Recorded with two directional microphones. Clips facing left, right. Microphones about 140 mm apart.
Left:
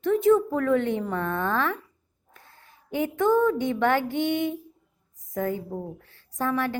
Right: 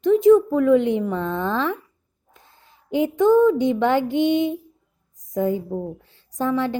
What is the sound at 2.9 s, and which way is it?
A woman's voice, 20° right (ahead or behind).